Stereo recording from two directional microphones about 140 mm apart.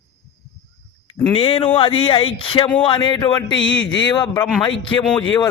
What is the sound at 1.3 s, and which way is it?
A man's voice, 40° left (ahead or behind).